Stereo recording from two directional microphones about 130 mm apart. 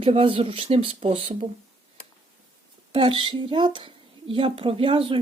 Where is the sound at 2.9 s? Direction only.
45° right (ahead or behind).